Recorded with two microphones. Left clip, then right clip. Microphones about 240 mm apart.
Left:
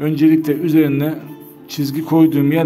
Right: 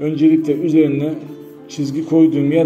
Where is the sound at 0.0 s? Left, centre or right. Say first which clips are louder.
Even; left.